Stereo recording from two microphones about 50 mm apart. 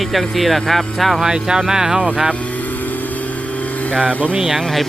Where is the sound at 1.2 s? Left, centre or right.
Centre.